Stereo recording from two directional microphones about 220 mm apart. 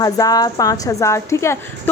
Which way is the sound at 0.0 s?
15° left (ahead or behind).